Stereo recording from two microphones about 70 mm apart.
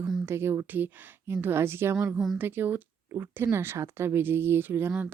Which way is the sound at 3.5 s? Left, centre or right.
Right.